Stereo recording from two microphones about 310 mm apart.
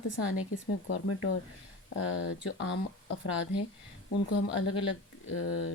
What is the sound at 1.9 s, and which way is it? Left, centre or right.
Speech, left.